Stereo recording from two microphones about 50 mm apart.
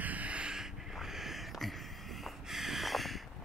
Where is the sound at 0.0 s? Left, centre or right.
Right.